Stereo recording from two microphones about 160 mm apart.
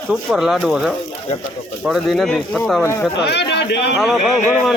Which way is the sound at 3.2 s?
90° left.